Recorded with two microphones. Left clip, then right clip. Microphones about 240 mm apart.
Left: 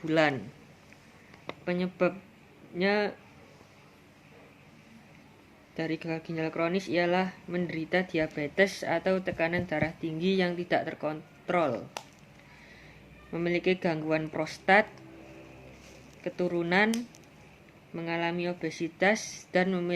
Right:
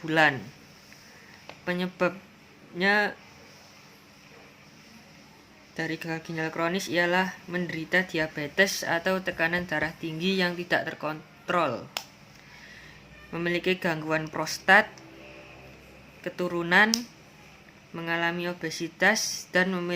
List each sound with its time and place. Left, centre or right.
0.0 s speech: right
1.6 s speech: right
5.7 s speech: right
13.3 s speech: right
16.2 s speech: right
17.9 s speech: right